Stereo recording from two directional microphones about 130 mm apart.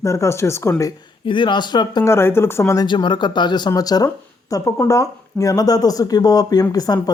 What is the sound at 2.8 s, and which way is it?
Speech, 35° left (ahead or behind).